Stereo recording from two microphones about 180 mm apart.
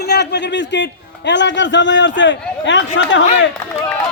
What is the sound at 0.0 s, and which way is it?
A man's voice, 70° left (ahead or behind).